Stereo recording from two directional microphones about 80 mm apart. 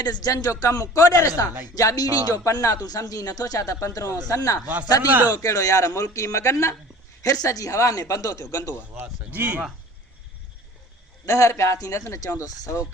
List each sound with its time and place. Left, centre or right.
0.0 s speech: left
8.7 s speech: right
11.3 s speech: left